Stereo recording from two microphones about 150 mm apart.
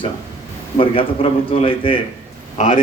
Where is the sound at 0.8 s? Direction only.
40° left (ahead or behind).